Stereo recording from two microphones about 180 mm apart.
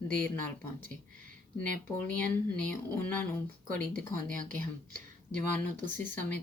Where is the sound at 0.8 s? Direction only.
45° right (ahead or behind).